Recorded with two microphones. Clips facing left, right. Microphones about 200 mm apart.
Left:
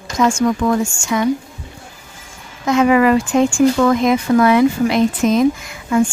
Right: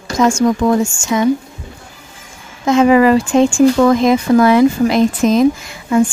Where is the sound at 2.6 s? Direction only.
30° right (ahead or behind).